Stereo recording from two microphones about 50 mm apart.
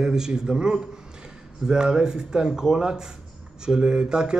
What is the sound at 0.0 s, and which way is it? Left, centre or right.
A man's voice, centre.